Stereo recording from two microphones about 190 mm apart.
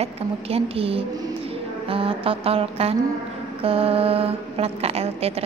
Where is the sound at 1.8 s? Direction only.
30° right (ahead or behind).